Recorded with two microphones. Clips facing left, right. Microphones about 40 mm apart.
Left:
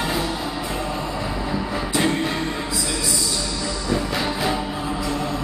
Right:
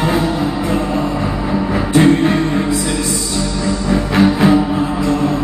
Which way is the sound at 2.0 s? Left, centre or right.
Right.